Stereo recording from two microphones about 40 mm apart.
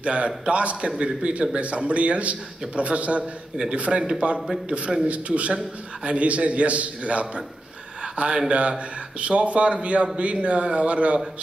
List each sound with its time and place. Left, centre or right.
0.0 s a man's voice: right
8.0 s a sound: right
8.5 s a man's voice: right